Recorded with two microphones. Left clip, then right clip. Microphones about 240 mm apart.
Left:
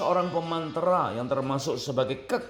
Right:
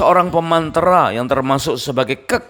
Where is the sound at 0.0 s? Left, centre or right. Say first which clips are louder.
Right 13 dB; right.